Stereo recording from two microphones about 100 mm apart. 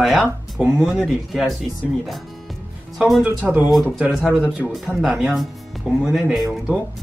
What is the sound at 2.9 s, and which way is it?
Speech, centre (ahead or behind).